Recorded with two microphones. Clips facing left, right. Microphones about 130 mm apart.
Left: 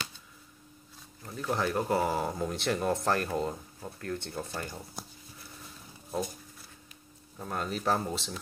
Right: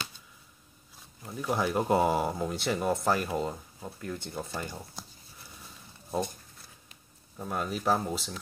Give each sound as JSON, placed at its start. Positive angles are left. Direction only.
{"t": 1.2, "sound": "speech", "side_deg": -10}
{"t": 4.5, "sound": "speech", "side_deg": 5}
{"t": 7.3, "sound": "speech", "side_deg": -5}